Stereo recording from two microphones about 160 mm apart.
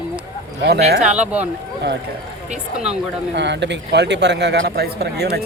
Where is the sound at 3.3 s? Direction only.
90° right.